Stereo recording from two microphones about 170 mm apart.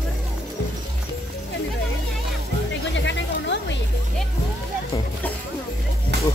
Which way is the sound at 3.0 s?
90° left.